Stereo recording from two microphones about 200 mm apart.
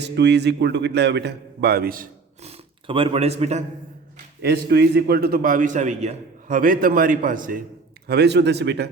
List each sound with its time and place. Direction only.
0.0 s a man's voice: 60° right (ahead or behind)
2.4 s speech: 30° right (ahead or behind)
4.4 s a man's voice: 55° right (ahead or behind)
8.0 s a man's voice: 55° right (ahead or behind)